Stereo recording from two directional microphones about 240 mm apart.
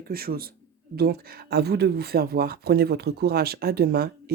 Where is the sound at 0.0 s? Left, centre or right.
Right.